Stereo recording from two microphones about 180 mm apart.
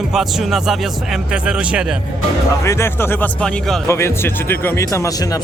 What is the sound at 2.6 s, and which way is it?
Speech, 15° left (ahead or behind).